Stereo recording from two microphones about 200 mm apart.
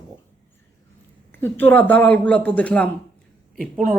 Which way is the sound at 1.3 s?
10° left (ahead or behind).